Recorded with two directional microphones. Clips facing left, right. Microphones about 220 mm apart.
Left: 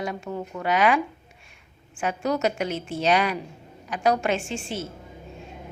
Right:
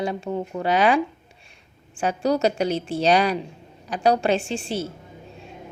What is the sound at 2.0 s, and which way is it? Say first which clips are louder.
A woman's voice: right 4 dB; 35° right (ahead or behind).